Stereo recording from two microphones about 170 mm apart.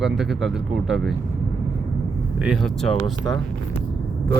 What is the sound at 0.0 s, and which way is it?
Speech, centre (ahead or behind).